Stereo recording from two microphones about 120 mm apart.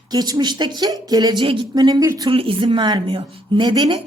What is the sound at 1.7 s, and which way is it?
Speech, 35° right (ahead or behind).